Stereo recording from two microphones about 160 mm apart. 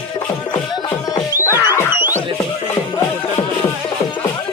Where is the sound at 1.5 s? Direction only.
15° right (ahead or behind).